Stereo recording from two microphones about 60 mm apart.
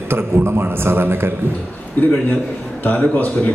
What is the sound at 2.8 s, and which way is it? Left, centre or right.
Speech, left.